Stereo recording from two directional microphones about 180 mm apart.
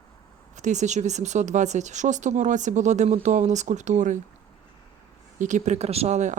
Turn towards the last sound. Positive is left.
turn(degrees=-40)  # may be behind; listen again after turning